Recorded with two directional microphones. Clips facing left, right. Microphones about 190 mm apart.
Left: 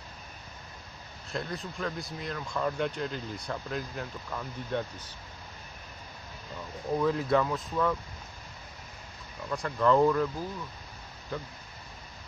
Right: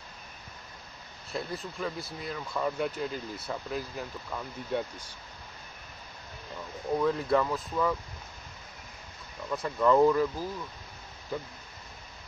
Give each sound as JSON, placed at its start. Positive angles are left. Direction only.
{"t": 1.3, "sound": "speech", "side_deg": 0}
{"t": 7.0, "sound": "speech", "side_deg": 0}
{"t": 9.7, "sound": "speech", "side_deg": -5}